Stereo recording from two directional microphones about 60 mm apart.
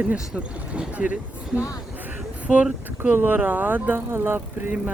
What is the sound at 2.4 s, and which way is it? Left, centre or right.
Speech, right.